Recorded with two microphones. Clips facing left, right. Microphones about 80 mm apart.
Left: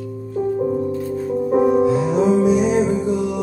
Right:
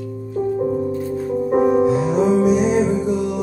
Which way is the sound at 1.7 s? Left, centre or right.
Right.